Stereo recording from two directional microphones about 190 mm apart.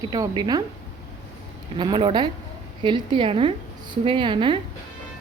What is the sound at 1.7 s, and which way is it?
Speech, 25° right (ahead or behind).